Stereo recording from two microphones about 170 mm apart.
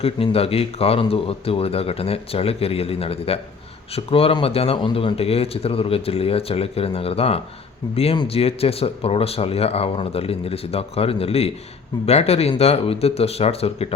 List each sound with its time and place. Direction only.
0.0 s speech: 35° left (ahead or behind)